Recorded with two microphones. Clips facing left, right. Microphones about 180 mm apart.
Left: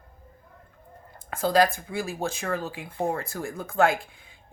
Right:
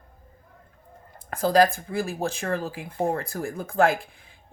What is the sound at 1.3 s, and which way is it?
Speech, 40° right (ahead or behind).